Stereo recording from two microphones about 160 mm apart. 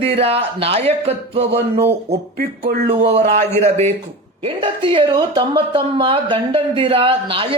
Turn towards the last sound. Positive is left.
turn(degrees=-35)  # may be behind; listen again after turning